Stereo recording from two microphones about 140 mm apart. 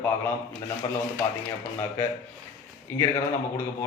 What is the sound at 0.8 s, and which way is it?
Speech, 25° left (ahead or behind).